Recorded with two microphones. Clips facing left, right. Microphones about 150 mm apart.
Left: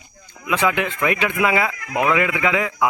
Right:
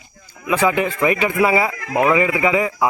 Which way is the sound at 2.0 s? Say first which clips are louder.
Right 3 dB; 5° right (ahead or behind).